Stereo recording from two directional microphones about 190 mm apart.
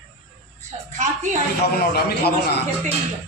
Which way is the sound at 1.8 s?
55° left (ahead or behind).